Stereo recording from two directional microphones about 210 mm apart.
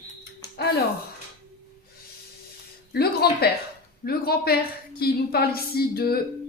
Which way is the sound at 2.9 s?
50° left (ahead or behind).